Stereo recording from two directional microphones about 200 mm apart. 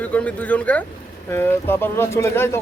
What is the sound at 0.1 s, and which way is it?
A man's voice, 5° left (ahead or behind).